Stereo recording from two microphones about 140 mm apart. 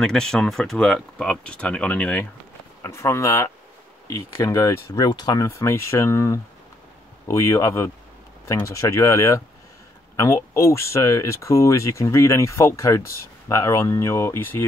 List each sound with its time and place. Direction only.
0.0 s speech: 5° left (ahead or behind)
2.8 s speech: 20° left (ahead or behind)